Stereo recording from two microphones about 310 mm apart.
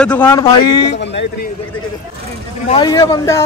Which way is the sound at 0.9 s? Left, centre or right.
Left.